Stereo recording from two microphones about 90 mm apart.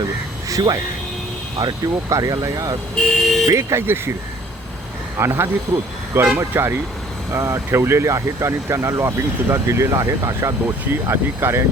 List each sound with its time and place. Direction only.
0.0 s a sound: 40° right (ahead or behind)
1.5 s speech: 45° right (ahead or behind)
2.9 s speech: 5° left (ahead or behind)
3.4 s speech: 35° right (ahead or behind)
5.1 s speech: 25° right (ahead or behind)